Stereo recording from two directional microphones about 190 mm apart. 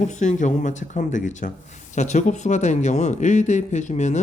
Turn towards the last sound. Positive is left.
turn(degrees=40)  # may be behind; listen again after turning